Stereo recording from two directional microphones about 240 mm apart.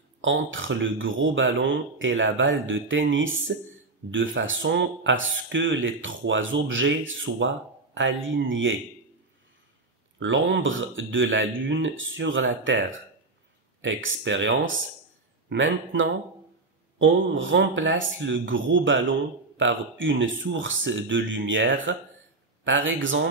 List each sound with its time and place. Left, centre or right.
0.2 s speech: right
10.1 s speech: right